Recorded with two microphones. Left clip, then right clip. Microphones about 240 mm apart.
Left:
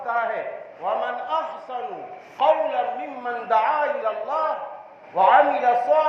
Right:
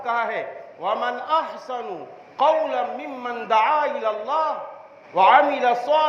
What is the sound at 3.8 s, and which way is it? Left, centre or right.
A man's voice, right.